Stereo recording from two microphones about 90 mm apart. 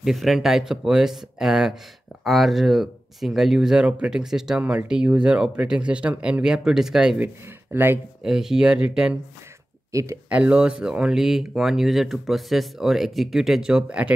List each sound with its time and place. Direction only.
0.0 s speech: centre (ahead or behind)
7.7 s speech: 25° right (ahead or behind)
8.2 s speech: 5° right (ahead or behind)
9.9 s speech: 35° right (ahead or behind)
10.3 s speech: 15° right (ahead or behind)